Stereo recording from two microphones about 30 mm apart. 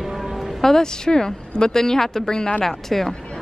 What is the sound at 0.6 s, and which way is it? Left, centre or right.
A woman's voice, centre.